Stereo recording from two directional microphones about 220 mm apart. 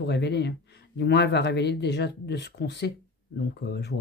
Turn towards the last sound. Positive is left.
turn(degrees=50)  # may be behind; listen again after turning